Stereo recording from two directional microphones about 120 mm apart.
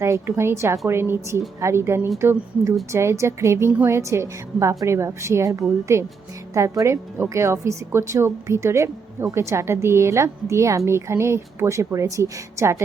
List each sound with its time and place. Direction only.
0.0 s speech: 20° right (ahead or behind)